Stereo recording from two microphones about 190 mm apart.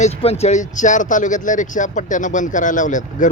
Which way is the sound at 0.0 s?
30° left (ahead or behind).